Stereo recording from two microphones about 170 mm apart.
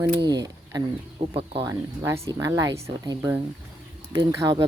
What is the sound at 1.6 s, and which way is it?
Speech, 20° right (ahead or behind).